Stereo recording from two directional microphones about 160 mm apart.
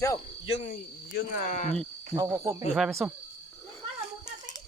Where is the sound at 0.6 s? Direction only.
50° left (ahead or behind).